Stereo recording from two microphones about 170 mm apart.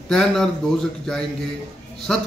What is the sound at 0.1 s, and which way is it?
Speech, 5° left (ahead or behind).